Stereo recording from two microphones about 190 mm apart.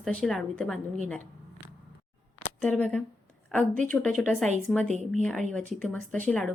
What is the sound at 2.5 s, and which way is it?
A woman's voice, 10° left (ahead or behind).